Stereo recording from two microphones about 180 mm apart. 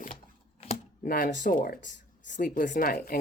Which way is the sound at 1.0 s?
50° left (ahead or behind).